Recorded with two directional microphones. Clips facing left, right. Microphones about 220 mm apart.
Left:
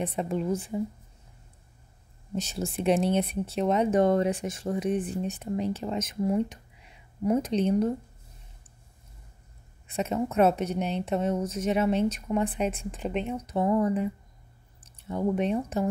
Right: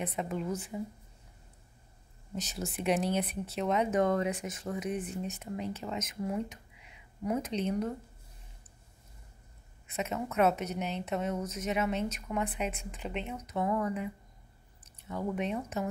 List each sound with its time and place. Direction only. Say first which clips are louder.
0.0 s a woman's voice: left 5 dB; 30° left (ahead or behind)
2.3 s a woman's voice: left 6 dB; 30° left (ahead or behind)
9.8 s a woman's voice: left 6 dB; 30° left (ahead or behind)
13.5 s a woman's voice: left 6 dB; 30° left (ahead or behind)